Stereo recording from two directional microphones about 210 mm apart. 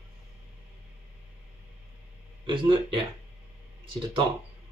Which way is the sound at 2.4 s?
25° right (ahead or behind).